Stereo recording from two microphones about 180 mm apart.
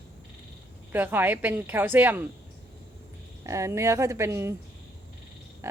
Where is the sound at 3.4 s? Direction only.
15° right (ahead or behind).